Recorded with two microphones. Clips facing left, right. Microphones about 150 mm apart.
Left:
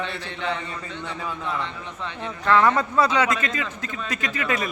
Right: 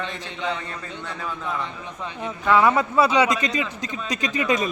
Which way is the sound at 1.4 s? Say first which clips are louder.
Even; 10° right (ahead or behind).